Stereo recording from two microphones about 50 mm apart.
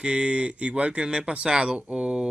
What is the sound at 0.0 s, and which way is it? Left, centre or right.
Speech, right.